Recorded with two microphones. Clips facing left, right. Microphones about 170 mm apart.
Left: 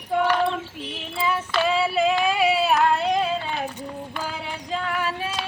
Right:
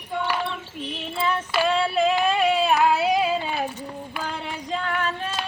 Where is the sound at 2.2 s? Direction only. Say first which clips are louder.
Even; 5° left (ahead or behind).